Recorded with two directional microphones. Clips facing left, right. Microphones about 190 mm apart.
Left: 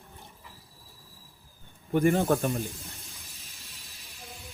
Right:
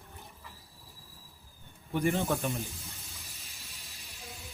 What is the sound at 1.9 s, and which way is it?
Speech, 55° left (ahead or behind).